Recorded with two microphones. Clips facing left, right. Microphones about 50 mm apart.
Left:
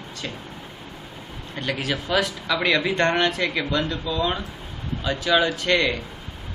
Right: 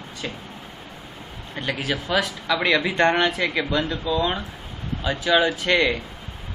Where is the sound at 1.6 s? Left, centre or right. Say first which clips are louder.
Even; centre.